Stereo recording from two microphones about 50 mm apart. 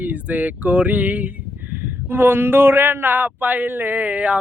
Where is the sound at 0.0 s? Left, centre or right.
Right.